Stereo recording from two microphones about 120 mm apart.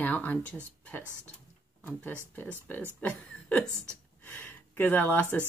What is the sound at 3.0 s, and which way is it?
Speech, 10° left (ahead or behind).